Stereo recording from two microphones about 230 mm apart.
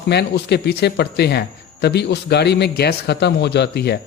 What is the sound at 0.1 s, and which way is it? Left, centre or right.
Speech, left.